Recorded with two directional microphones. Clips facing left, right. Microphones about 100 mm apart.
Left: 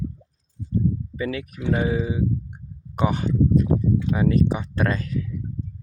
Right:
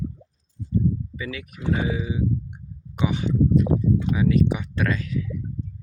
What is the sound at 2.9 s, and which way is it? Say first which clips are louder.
Speech: left 1 dB; 45° left (ahead or behind).